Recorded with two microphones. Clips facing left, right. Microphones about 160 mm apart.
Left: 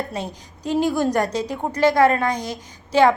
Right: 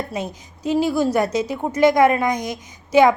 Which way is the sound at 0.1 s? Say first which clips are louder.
Right 2 dB; 10° right (ahead or behind).